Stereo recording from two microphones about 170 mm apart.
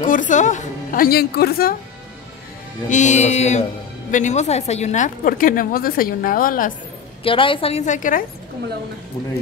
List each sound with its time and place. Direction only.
0.0 s a woman's voice: 50° left (ahead or behind)
2.9 s a woman's voice: 45° left (ahead or behind)
7.2 s a woman's voice: 30° left (ahead or behind); by 8.2 s 50° left (ahead or behind)